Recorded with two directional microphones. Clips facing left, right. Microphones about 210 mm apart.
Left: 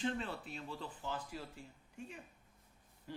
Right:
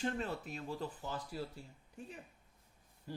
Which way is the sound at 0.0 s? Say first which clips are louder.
Right 1 dB; 45° right (ahead or behind).